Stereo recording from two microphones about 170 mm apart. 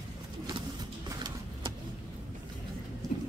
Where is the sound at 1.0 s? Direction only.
25° right (ahead or behind).